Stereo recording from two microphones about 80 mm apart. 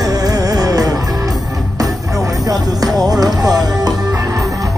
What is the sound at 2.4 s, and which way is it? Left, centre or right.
Music, right.